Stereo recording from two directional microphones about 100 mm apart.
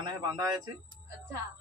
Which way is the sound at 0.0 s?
40° right (ahead or behind).